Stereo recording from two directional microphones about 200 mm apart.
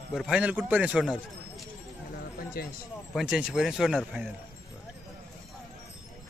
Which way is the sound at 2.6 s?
50° left (ahead or behind).